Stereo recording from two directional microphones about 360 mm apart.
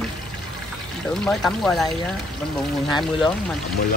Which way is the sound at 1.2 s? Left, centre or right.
Centre.